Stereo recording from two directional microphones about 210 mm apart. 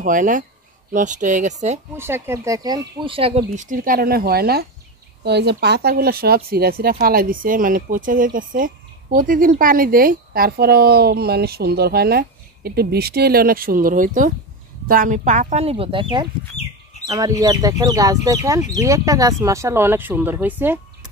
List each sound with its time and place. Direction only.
0.0 s speech: 40° right (ahead or behind)
2.0 s speech: 10° right (ahead or behind); by 3.4 s 25° right (ahead or behind)
3.4 s speech: 40° right (ahead or behind); by 20.8 s 10° right (ahead or behind)